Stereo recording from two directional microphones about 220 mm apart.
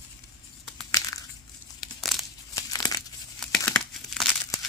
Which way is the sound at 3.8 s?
Centre (ahead or behind).